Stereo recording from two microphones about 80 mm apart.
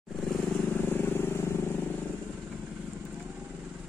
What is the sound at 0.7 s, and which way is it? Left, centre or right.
Vehicle, left.